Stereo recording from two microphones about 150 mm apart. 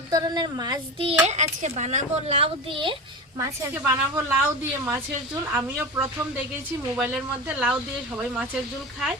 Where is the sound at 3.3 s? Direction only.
15° right (ahead or behind).